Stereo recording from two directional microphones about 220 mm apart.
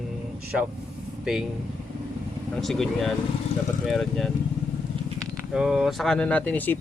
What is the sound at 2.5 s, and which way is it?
Speech, centre (ahead or behind).